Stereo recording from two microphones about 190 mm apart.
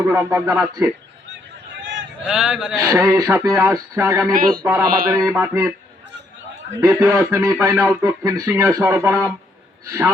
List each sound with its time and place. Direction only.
0.0 s speech: 15° right (ahead or behind)
1.8 s a sound: 70° right (ahead or behind)
2.2 s a man's voice: 5° right (ahead or behind)
2.7 s speech: 15° right (ahead or behind)
4.4 s a sound: 50° right (ahead or behind)
4.6 s speech: 20° right (ahead or behind)
6.7 s a man's voice: 15° right (ahead or behind)